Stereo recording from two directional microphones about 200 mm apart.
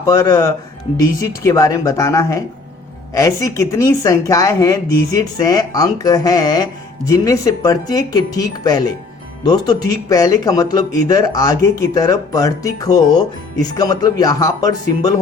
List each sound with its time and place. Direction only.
0.0 s speech: 15° left (ahead or behind)